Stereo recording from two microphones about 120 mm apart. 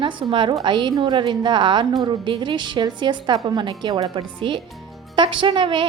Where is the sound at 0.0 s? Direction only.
45° right (ahead or behind).